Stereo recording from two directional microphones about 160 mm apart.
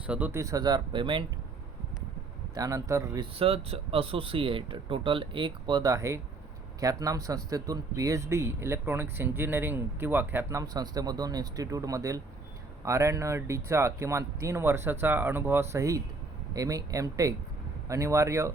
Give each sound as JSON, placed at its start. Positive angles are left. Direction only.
{"t": 0.1, "sound": "speech", "side_deg": -10}
{"t": 2.6, "sound": "speech", "side_deg": -20}
{"t": 3.3, "sound": "speech", "side_deg": -35}